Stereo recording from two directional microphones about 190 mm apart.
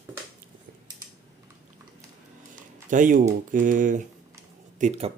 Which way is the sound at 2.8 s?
45° right (ahead or behind).